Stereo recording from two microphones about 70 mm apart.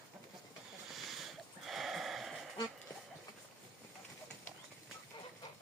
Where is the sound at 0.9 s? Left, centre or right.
Centre.